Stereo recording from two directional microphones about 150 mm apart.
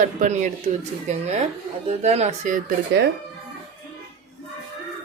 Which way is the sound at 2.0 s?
45° right (ahead or behind).